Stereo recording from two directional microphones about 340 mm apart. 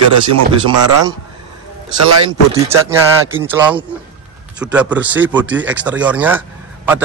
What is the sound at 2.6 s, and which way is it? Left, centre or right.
Speech, centre.